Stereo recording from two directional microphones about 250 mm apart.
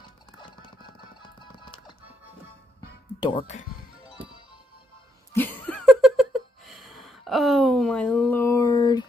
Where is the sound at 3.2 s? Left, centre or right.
Left.